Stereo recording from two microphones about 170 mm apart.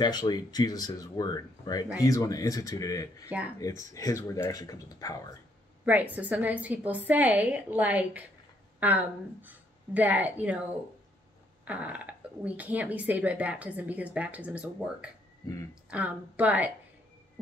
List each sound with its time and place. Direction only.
0.0 s speech: 25° left (ahead or behind)
3.3 s speech: 10° right (ahead or behind)
3.9 s speech: 20° left (ahead or behind)
5.9 s a woman's voice: 10° right (ahead or behind)
11.6 s speech: 10° right (ahead or behind)